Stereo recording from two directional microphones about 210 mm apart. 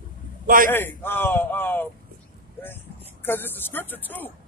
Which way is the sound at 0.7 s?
10° left (ahead or behind).